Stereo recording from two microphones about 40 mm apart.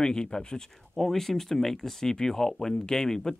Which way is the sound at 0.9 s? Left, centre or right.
Centre.